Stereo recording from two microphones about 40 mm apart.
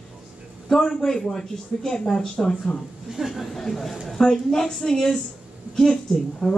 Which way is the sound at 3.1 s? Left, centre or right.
Centre.